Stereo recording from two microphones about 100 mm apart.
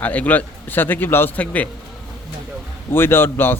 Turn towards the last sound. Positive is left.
turn(degrees=20)  # may be behind; listen again after turning